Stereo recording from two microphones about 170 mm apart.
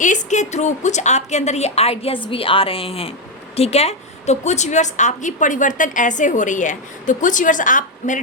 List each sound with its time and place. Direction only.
0.0 s a woman's voice: 45° left (ahead or behind)